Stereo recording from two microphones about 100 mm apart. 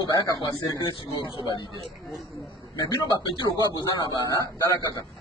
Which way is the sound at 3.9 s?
40° left (ahead or behind).